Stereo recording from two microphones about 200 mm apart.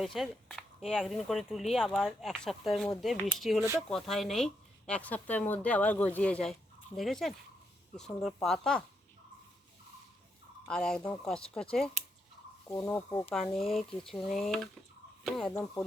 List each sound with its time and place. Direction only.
0.0 s speech: centre (ahead or behind)
10.7 s speech: 5° left (ahead or behind)
13.3 s speech: centre (ahead or behind)